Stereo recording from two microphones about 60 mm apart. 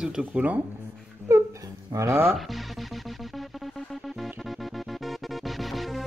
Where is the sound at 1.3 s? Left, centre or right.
Right.